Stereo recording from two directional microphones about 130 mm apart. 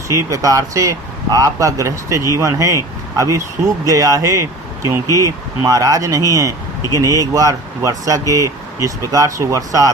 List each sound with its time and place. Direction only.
0.3 s speech: 25° right (ahead or behind)